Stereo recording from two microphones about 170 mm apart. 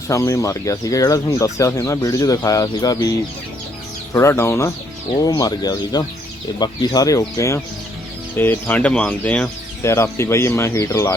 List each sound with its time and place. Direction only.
0.1 s speech: 20° left (ahead or behind)